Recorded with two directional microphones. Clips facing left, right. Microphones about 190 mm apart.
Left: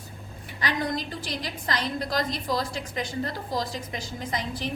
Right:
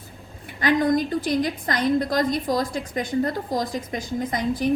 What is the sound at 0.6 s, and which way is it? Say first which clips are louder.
A woman's voice: right 9 dB; 50° right (ahead or behind).